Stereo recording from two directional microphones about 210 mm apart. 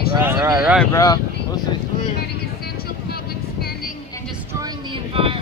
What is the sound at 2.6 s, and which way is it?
Vehicle, 45° left (ahead or behind).